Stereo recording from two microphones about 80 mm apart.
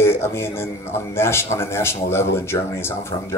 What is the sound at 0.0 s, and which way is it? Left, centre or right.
A man's voice, left.